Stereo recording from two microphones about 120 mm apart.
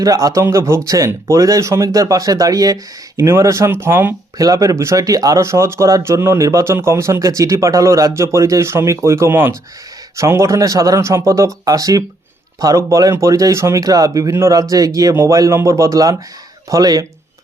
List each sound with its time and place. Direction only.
0.0 s speech: 30° right (ahead or behind)